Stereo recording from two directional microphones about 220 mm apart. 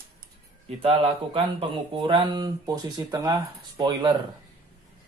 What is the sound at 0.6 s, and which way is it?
Speech, 25° right (ahead or behind).